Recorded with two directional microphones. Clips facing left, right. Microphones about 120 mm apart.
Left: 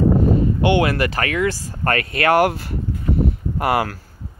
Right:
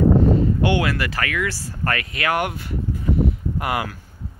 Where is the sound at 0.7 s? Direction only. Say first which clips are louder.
Left 4 dB; 25° left (ahead or behind).